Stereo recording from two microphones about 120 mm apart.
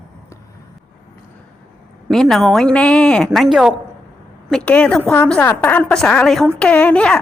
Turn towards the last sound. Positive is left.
turn(degrees=10)  # may be behind; listen again after turning